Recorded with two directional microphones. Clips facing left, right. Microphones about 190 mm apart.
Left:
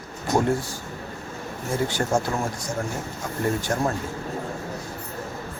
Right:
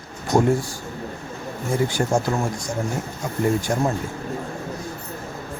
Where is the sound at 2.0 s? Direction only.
10° right (ahead or behind).